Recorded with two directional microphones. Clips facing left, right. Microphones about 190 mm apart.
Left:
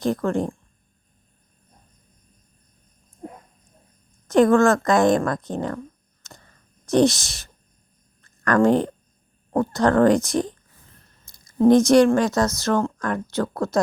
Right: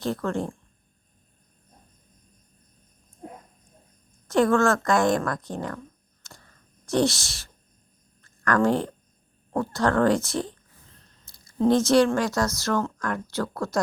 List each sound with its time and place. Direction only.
0.0 s speech: 15° left (ahead or behind)
4.3 s speech: 20° left (ahead or behind)
6.2 s a sound: 20° left (ahead or behind)
6.8 s speech: 20° left (ahead or behind)
11.6 s speech: 15° left (ahead or behind)